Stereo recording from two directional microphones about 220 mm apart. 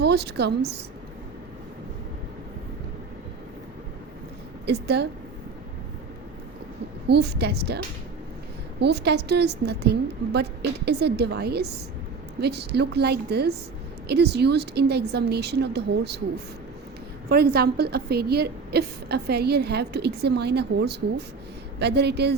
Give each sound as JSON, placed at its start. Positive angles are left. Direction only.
{"t": 0.0, "sound": "a woman's voice", "side_deg": -50}
{"t": 4.6, "sound": "a woman's voice", "side_deg": -45}
{"t": 7.1, "sound": "a woman's voice", "side_deg": -50}
{"t": 8.8, "sound": "a woman's voice", "side_deg": -50}
{"t": 17.2, "sound": "a woman's voice", "side_deg": -45}